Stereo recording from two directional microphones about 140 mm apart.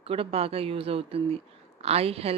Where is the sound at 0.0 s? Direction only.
45° right (ahead or behind).